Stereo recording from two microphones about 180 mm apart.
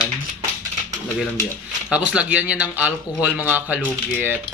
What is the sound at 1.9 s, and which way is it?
A man's voice, 5° right (ahead or behind).